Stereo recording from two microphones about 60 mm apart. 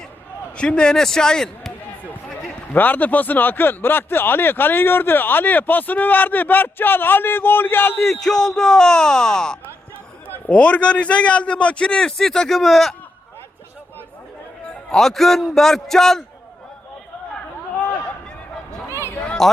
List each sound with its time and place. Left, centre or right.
0.5 s speech: centre
2.7 s speech: left
8.1 s speech: centre
10.2 s a man's voice: left; by 13.0 s centre
14.8 s a man's voice: centre
19.4 s a man's voice: centre